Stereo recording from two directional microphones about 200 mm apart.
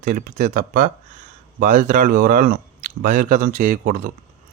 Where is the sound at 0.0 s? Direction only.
45° right (ahead or behind).